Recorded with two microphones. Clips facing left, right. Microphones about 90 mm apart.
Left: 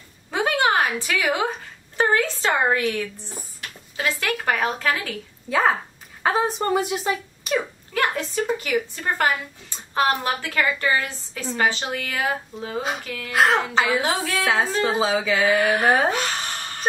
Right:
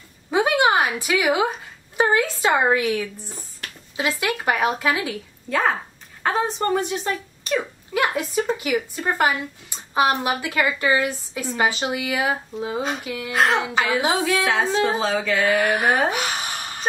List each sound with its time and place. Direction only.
0.3 s a sound: 15° right (ahead or behind)
2.0 s speech: 15° right (ahead or behind)
5.5 s a woman's voice: centre (ahead or behind)
7.9 s a woman's voice: 15° right (ahead or behind)
13.3 s a woman's voice: centre (ahead or behind)
15.5 s speech: 15° right (ahead or behind)
15.8 s a woman's voice: centre (ahead or behind)
16.1 s a sound: 15° right (ahead or behind)